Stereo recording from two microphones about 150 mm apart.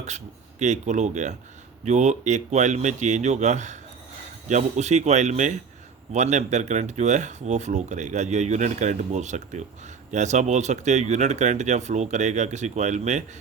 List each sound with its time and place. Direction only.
0.6 s speech: 50° right (ahead or behind)